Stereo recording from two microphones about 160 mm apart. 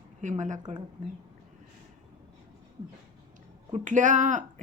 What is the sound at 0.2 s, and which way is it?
Speech, 50° right (ahead or behind).